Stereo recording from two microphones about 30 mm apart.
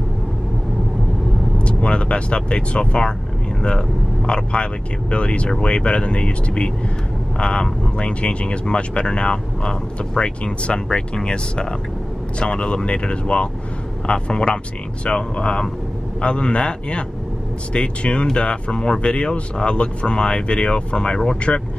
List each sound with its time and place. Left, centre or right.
1.6 s speech: left
4.3 s speech: left